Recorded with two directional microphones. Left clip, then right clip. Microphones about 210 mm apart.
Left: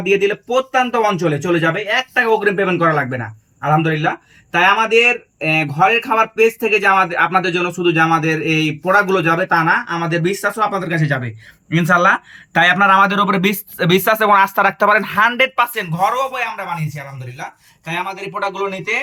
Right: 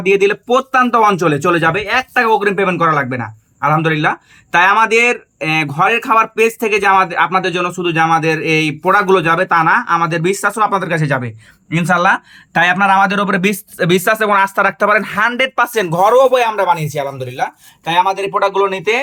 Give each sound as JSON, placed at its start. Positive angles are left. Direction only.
{"t": 0.0, "sound": "speech", "side_deg": -15}
{"t": 2.2, "sound": "speech", "side_deg": -5}
{"t": 15.5, "sound": "speech", "side_deg": -25}